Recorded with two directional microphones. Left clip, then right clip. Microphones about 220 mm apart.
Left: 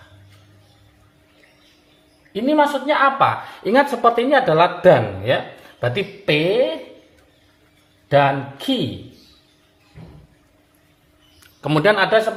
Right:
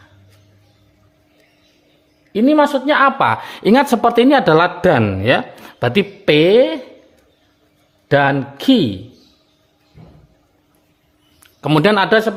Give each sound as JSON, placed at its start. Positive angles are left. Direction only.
{"t": 2.3, "sound": "a woman's voice", "side_deg": -50}
{"t": 8.1, "sound": "a woman's voice", "side_deg": -50}
{"t": 11.8, "sound": "a woman's voice", "side_deg": -45}